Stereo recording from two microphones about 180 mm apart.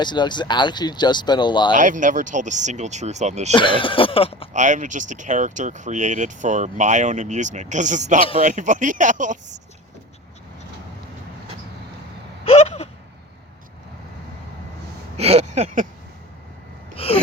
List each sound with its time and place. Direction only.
0.0 s speech: 25° left (ahead or behind)
1.7 s speech: 45° right (ahead or behind)
3.5 s speech: 25° left (ahead or behind)
4.5 s speech: 45° right (ahead or behind)
12.5 s a sound: 35° left (ahead or behind)
15.2 s a sound: 35° right (ahead or behind)
16.9 s gasp: 35° left (ahead or behind)